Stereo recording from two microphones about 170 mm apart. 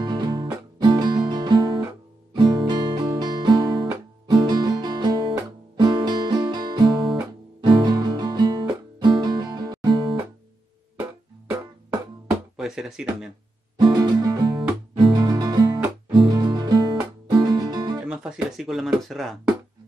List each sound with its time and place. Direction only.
0.0 s music: 25° right (ahead or behind)
2.3 s guitar: 25° right (ahead or behind)
4.4 s music: 25° right (ahead or behind)
12.5 s speech: 5° right (ahead or behind)
13.7 s music: 25° right (ahead or behind)
18.0 s speech: 5° right (ahead or behind)